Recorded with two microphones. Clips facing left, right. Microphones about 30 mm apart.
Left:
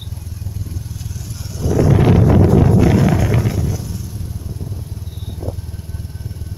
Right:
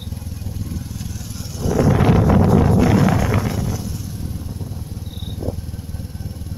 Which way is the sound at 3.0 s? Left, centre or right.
Centre.